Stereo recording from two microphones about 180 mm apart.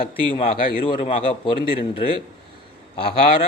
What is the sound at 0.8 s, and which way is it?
A man's voice, 30° left (ahead or behind).